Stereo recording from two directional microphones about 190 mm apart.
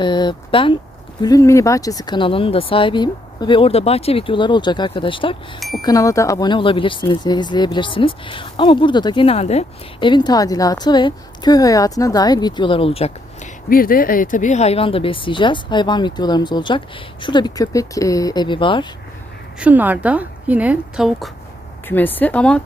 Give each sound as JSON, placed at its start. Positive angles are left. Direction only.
{"t": 0.0, "sound": "speech", "side_deg": 25}
{"t": 5.5, "sound": "speech", "side_deg": 0}
{"t": 5.8, "sound": "speech", "side_deg": 20}
{"t": 13.7, "sound": "speech", "side_deg": 50}
{"t": 19.5, "sound": "a woman's voice", "side_deg": -5}
{"t": 21.8, "sound": "speech", "side_deg": 10}